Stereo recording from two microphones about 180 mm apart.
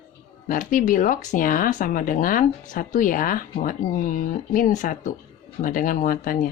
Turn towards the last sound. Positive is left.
turn(degrees=50)  # may be behind; listen again after turning